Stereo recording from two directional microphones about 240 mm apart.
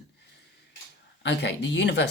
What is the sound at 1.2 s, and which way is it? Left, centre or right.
Speech, left.